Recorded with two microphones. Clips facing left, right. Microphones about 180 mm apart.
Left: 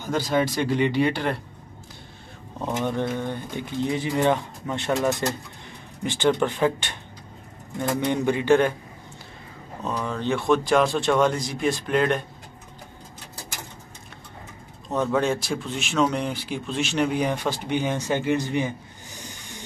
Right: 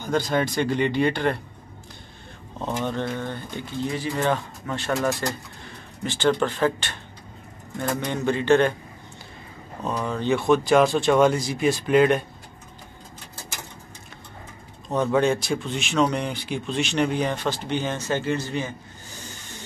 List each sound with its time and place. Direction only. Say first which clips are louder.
0.0 s speech: even; 5° left (ahead or behind)
2.6 s speech: left 1 dB; 10° left (ahead or behind)
8.0 s speech: left 3 dB; 15° left (ahead or behind)
10.0 s speech: right 2 dB; centre (ahead or behind)
14.9 s speech: right 2 dB; centre (ahead or behind); by 18.7 s 15° left (ahead or behind)
19.2 s vehicle: left 1 dB; 15° left (ahead or behind)